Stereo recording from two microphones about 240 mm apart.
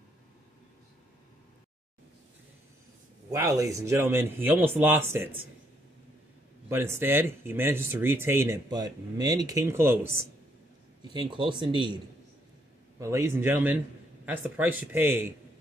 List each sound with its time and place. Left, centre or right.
3.3 s speech: centre
6.7 s speech: centre
13.0 s speech: centre